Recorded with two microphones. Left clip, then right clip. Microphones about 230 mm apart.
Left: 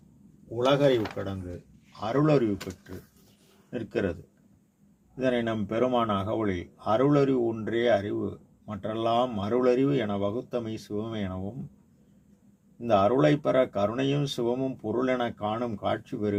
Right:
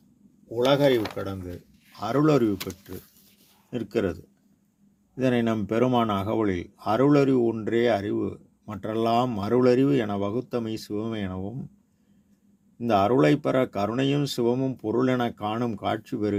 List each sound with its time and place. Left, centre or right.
0.6 s a man's voice: right
3.7 s a man's voice: right
12.8 s a man's voice: right